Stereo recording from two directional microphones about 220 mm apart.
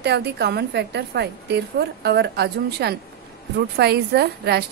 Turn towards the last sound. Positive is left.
turn(degrees=-50)  # may be behind; listen again after turning